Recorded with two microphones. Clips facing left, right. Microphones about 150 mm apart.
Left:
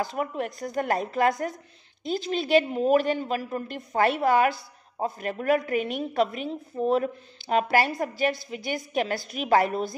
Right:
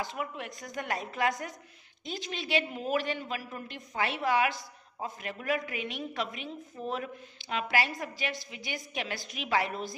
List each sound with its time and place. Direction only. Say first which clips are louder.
0.0 s a woman's voice: left 8 dB; 40° left (ahead or behind)